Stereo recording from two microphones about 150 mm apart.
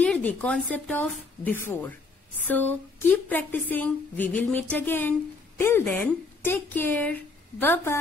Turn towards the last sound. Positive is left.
turn(degrees=15)  # may be behind; listen again after turning